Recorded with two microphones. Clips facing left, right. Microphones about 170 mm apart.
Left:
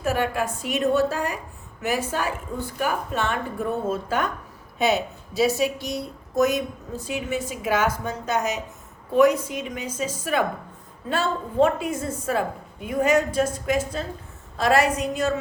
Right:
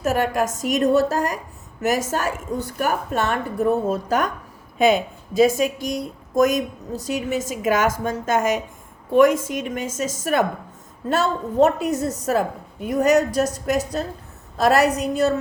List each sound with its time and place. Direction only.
0.0 s a woman's voice: 45° right (ahead or behind)
7.9 s a woman's voice: 90° right
8.2 s a woman's voice: 50° right (ahead or behind)
11.1 s a woman's voice: 45° right (ahead or behind)